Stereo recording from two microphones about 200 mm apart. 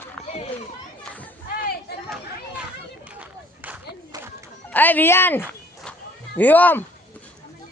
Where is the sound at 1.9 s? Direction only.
55° left (ahead or behind).